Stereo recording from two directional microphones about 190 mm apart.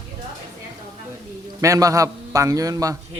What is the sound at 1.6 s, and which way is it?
Speech, 15° right (ahead or behind).